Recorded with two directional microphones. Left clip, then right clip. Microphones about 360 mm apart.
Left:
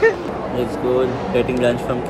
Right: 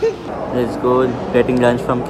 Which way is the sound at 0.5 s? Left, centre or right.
Centre.